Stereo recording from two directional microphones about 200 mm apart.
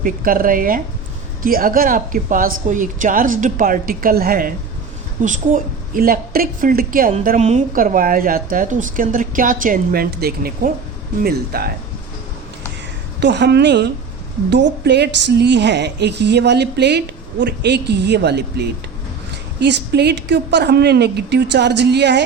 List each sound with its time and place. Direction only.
0.0 s a woman's voice: 45° right (ahead or behind)
13.1 s a woman's voice: 60° right (ahead or behind)